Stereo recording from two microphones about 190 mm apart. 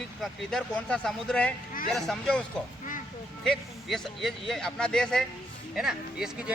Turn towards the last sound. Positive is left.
turn(degrees=0)  # may be behind; listen again after turning